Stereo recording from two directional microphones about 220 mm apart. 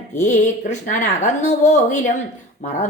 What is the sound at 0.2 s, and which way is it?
A woman's voice, 35° left (ahead or behind).